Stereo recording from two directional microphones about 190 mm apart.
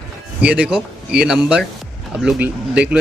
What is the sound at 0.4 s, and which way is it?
Speech, 5° right (ahead or behind).